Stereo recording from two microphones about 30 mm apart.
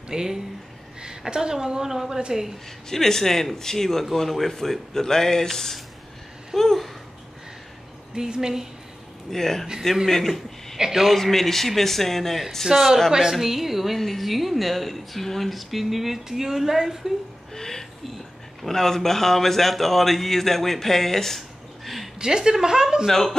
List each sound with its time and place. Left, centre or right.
0.1 s speech: centre
2.9 s a man's voice: centre
8.4 s speech: centre
9.3 s a man's voice: centre
10.8 s speech: centre
11.1 s a man's voice: centre
12.7 s speech: centre
13.9 s speech: centre
17.6 s a man's voice: centre
22.2 s speech: right